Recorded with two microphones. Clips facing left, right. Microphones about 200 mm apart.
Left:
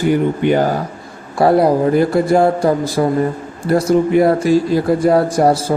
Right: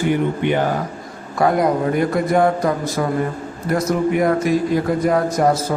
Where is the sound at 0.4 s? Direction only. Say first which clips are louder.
Left 4 dB; 40° left (ahead or behind).